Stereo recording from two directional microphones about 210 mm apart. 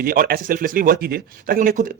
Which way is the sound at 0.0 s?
45° right (ahead or behind).